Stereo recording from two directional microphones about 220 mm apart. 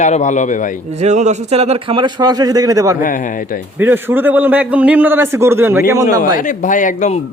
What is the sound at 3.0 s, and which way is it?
Speech, 35° left (ahead or behind).